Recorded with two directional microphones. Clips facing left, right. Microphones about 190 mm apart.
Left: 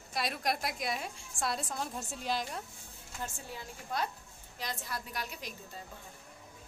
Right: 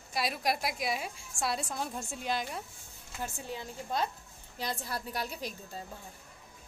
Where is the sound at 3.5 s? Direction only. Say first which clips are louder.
Right 5 dB; 25° right (ahead or behind).